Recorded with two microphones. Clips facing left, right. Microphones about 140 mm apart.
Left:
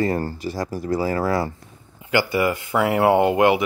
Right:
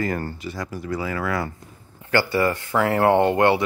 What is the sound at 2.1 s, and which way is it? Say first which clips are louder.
Speech: even; 15° left (ahead or behind).